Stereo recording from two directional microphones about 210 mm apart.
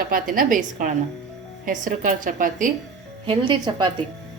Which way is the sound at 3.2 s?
25° right (ahead or behind).